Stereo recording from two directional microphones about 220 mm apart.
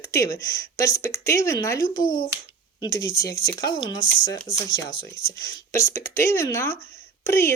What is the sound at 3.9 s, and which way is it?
Speech, 60° left (ahead or behind).